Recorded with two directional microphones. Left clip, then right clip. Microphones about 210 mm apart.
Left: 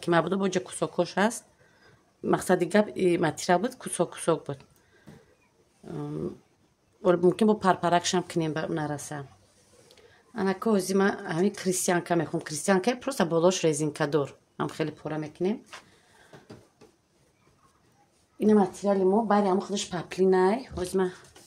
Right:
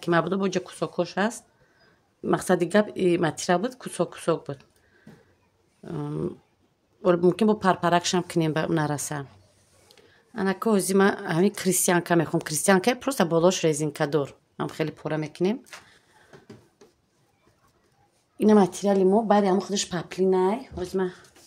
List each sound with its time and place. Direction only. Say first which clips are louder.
0.0 s speech: right 1 dB; 10° right (ahead or behind)
5.9 s speech: right 3 dB; 20° right (ahead or behind)
9.8 s speech: right 2 dB; 10° right (ahead or behind)
15.0 s speech: right 4 dB; 20° right (ahead or behind)
18.4 s speech: right 3 dB; 30° right (ahead or behind)
20.1 s speech: even; centre (ahead or behind)